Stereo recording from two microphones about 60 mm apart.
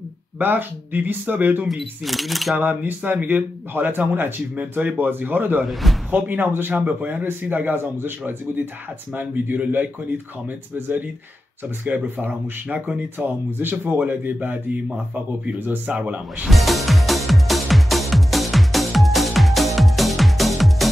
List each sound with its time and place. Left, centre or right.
0.4 s speech: right
1.7 s speech: centre
2.6 s speech: right
5.7 s speech: centre
6.1 s speech: right
9.1 s speech: right
16.4 s speech: centre
17.3 s music: centre